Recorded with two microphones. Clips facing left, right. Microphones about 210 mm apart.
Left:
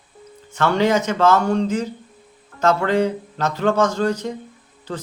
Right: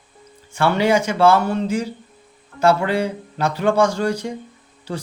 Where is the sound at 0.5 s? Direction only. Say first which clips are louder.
Even; 10° right (ahead or behind).